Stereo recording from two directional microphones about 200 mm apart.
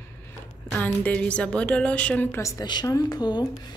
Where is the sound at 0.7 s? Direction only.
5° left (ahead or behind).